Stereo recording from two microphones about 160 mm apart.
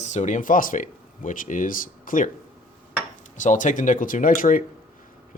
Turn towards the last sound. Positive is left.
turn(degrees=55)  # may be behind; listen again after turning